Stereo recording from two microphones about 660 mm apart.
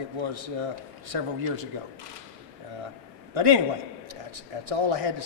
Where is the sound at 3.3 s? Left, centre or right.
Right.